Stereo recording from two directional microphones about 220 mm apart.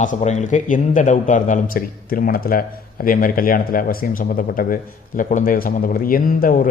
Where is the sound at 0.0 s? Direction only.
30° left (ahead or behind).